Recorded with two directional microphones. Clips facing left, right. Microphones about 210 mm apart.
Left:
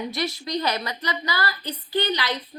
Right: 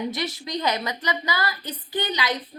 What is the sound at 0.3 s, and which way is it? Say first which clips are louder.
A woman's voice: even; 20° right (ahead or behind).